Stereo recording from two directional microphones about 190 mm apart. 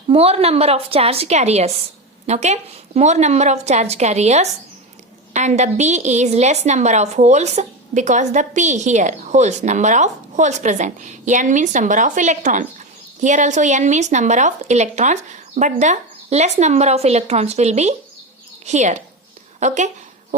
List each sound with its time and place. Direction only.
0.1 s a woman's voice: 30° right (ahead or behind)